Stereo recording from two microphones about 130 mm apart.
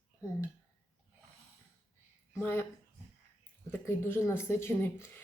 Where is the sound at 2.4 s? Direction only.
15° left (ahead or behind).